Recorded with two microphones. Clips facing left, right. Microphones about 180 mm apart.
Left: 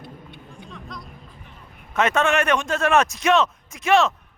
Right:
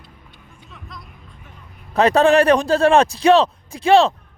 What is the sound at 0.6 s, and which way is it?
Music, centre (ahead or behind).